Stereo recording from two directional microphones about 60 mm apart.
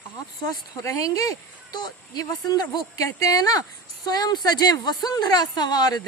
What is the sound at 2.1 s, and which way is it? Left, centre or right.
A woman's voice, left.